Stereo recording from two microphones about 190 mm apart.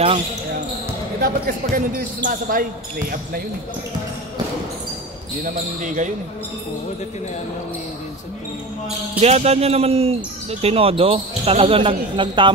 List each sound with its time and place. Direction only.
1.2 s speech: 50° right (ahead or behind)
5.4 s speech: 40° right (ahead or behind)
9.2 s speech: 35° right (ahead or behind)